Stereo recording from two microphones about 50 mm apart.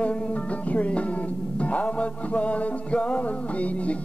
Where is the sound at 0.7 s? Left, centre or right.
Left.